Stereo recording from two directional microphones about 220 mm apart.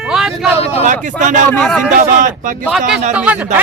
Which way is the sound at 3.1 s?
5° right (ahead or behind).